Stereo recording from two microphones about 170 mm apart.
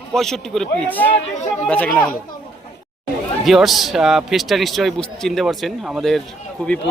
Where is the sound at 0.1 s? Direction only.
Centre (ahead or behind).